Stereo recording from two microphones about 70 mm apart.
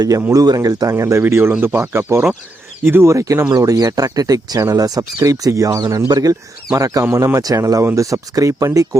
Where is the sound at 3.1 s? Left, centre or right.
Right.